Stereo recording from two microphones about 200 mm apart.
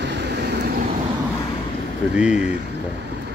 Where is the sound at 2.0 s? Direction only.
5° right (ahead or behind).